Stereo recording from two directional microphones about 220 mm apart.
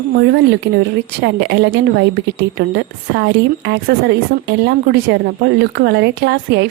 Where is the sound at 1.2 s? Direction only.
50° right (ahead or behind).